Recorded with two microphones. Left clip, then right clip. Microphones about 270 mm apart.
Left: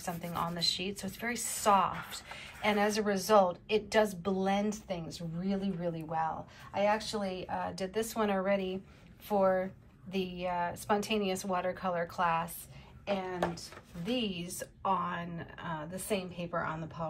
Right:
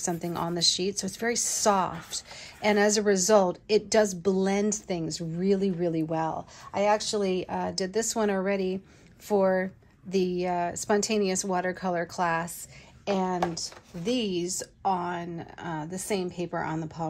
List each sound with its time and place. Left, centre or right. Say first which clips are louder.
0.0 s a woman's voice: right 5 dB; right